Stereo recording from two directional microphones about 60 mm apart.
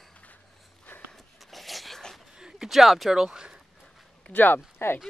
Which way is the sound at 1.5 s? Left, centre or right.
Centre.